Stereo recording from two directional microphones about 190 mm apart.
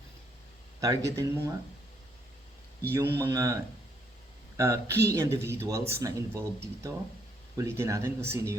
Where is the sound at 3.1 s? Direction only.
15° right (ahead or behind).